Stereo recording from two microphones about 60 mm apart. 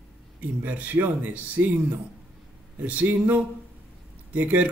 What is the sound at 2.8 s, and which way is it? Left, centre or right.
Speech, right.